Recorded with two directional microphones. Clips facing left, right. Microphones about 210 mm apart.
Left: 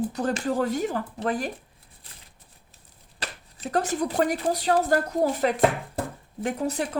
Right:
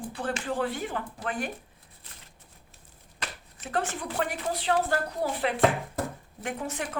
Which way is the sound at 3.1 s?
35° left (ahead or behind).